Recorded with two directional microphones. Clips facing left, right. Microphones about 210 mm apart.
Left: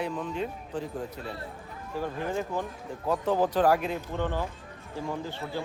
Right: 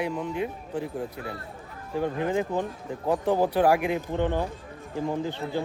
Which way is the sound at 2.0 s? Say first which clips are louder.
Right 5 dB; 20° right (ahead or behind).